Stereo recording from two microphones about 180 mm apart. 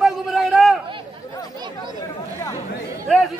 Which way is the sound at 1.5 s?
25° right (ahead or behind).